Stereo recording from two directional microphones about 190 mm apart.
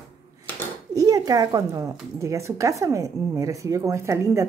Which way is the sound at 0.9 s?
20° right (ahead or behind).